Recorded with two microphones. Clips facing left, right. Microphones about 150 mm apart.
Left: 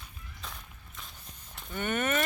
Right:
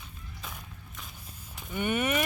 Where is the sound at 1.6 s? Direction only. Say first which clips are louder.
Right 2 dB; 10° right (ahead or behind).